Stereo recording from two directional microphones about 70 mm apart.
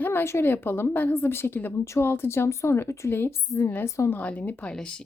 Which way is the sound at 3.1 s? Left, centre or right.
Left.